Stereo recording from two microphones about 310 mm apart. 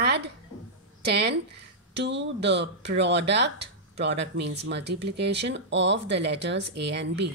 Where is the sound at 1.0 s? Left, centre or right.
Right.